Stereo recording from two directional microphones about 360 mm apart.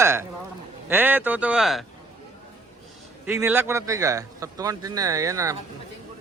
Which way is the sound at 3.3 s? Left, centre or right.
Centre.